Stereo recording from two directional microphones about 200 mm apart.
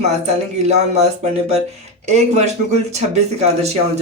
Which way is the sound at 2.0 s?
35° right (ahead or behind).